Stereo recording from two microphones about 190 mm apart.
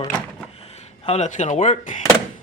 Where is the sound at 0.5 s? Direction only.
35° left (ahead or behind).